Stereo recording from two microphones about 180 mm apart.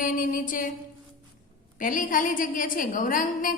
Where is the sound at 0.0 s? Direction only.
50° left (ahead or behind).